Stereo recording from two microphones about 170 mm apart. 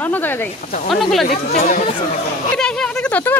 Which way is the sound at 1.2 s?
50° left (ahead or behind).